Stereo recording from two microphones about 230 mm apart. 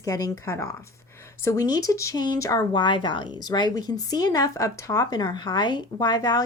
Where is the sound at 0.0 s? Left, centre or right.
Centre.